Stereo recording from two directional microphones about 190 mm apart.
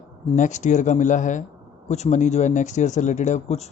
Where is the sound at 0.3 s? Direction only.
40° left (ahead or behind).